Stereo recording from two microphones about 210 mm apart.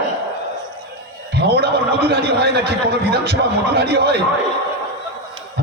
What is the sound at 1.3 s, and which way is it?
A man's voice, 50° right (ahead or behind).